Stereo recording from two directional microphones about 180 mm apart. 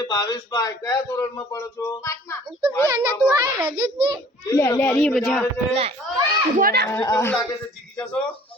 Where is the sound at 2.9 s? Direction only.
20° right (ahead or behind).